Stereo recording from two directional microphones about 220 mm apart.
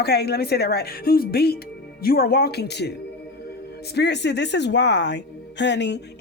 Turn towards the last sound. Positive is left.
turn(degrees=50)  # may be behind; listen again after turning